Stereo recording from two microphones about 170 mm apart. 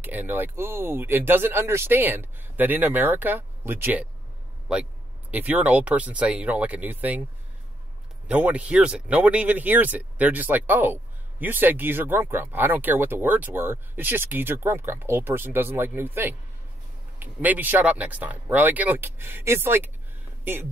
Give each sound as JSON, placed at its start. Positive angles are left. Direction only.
{"t": 0.0, "sound": "speech", "side_deg": -10}
{"t": 5.3, "sound": "speech", "side_deg": -10}
{"t": 8.3, "sound": "speech", "side_deg": -10}